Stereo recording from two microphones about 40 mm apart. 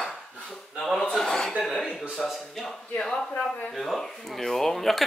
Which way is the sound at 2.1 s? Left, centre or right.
Centre.